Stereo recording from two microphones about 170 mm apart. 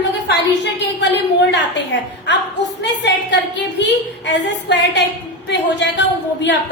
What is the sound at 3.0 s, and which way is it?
A woman's voice, 90° left.